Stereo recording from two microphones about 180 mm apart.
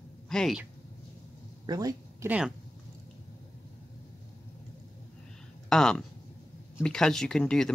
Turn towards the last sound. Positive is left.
turn(degrees=5)  # may be behind; listen again after turning